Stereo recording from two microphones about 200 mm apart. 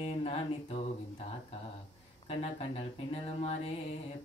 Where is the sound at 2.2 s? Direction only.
30° left (ahead or behind).